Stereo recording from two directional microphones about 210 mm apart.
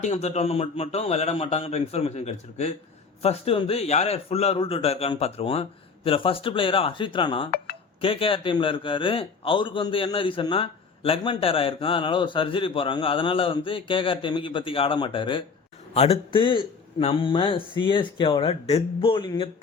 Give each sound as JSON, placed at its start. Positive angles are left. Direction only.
{"t": 0.0, "sound": "a man's voice", "side_deg": 30}